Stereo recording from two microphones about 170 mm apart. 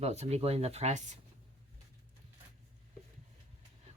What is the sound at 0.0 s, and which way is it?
Speech, 40° right (ahead or behind).